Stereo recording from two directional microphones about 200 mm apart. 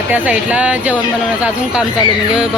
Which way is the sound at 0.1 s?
5° right (ahead or behind).